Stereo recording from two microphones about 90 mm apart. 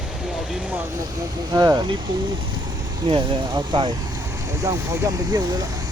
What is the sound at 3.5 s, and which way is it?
Speech, 55° right (ahead or behind).